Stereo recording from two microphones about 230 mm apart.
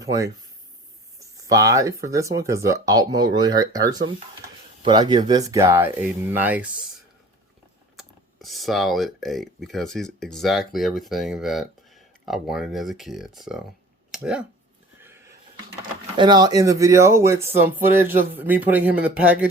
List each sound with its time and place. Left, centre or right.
0.0 s speech: centre
1.5 s speech: centre
7.9 s speech: centre
16.1 s speech: centre
18.0 s a man's voice: right
18.3 s speech: centre